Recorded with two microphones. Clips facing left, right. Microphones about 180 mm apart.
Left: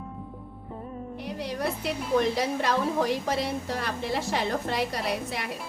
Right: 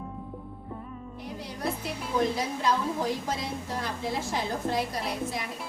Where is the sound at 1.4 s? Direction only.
70° left (ahead or behind).